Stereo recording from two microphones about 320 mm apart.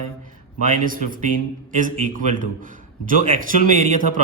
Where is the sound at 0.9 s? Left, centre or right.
Right.